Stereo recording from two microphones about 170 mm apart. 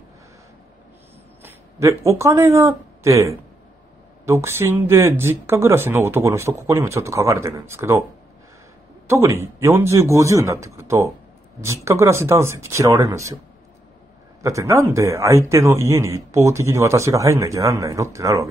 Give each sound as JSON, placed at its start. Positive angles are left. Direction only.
{"t": 1.4, "sound": "speech", "side_deg": -15}
{"t": 9.1, "sound": "speech", "side_deg": -15}
{"t": 14.4, "sound": "speech", "side_deg": -20}